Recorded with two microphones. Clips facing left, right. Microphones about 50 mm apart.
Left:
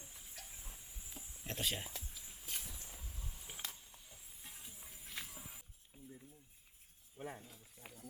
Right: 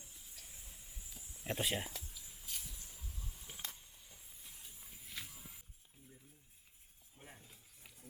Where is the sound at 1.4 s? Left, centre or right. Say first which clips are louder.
Right 3 dB; centre.